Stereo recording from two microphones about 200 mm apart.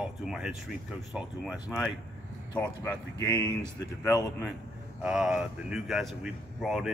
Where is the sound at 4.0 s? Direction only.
20° left (ahead or behind).